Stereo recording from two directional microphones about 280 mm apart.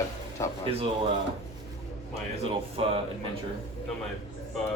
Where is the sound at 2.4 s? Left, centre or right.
Centre.